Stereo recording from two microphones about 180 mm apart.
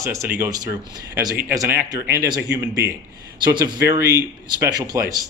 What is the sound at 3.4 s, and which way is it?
Speech, 25° right (ahead or behind).